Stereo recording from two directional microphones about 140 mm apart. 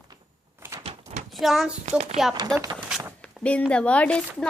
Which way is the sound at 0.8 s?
45° right (ahead or behind).